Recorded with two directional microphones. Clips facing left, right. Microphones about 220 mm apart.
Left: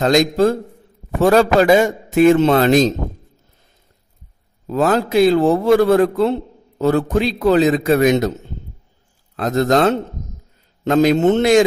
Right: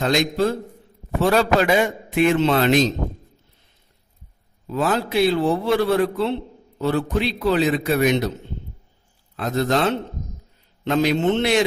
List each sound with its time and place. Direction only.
0.0 s a man's voice: 40° left (ahead or behind)
4.6 s a man's voice: 45° left (ahead or behind)